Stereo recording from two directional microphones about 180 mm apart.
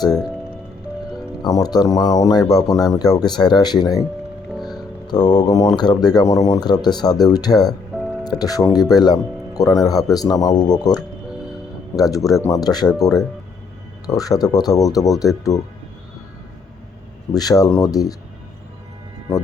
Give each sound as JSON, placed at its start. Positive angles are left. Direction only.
{"t": 1.4, "sound": "speech", "side_deg": 20}
{"t": 4.5, "sound": "music", "side_deg": 0}
{"t": 5.0, "sound": "speech", "side_deg": 20}
{"t": 17.3, "sound": "speech", "side_deg": 20}